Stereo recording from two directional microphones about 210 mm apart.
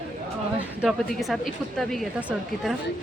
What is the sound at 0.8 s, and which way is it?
Speech, centre (ahead or behind).